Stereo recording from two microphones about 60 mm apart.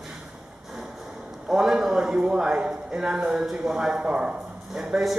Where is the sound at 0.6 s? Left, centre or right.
Centre.